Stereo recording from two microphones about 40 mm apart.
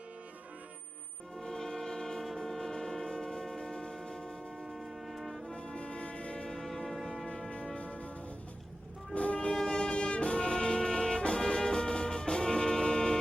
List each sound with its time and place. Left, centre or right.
1.4 s train: centre
4.6 s music: centre
5.5 s foghorn: left
6.5 s a sound: centre
7.8 s music: left
9.1 s music: left